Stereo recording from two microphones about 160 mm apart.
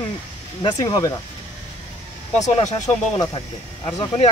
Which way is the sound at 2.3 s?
45° left (ahead or behind).